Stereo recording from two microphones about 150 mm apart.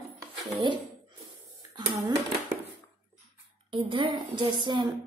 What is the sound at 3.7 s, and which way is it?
A woman's voice, 35° right (ahead or behind).